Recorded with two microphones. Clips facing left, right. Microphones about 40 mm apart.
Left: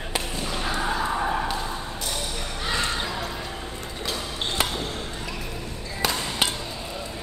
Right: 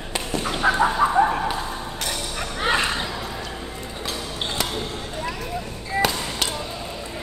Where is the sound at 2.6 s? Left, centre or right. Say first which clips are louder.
Right 6 dB; right.